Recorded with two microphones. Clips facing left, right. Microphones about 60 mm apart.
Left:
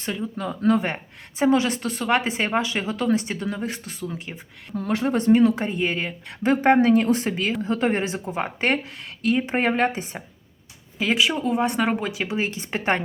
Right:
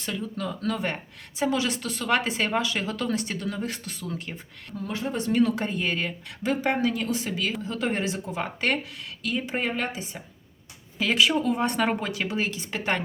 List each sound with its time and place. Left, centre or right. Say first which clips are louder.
0.0 s speech: left 3 dB; left
4.7 s speech: left 7 dB; left
5.3 s speech: left 5 dB; left
6.4 s speech: left 7 dB; left
7.3 s speech: left 5 dB; left
10.9 s speech: left 1 dB; centre; by 13.0 s left